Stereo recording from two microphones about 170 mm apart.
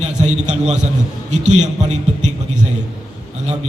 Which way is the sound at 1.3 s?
45° right (ahead or behind).